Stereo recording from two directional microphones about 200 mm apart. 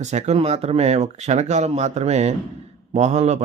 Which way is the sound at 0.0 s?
35° right (ahead or behind).